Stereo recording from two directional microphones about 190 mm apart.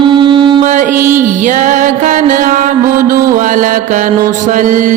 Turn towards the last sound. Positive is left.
turn(degrees=-45)  # may be behind; listen again after turning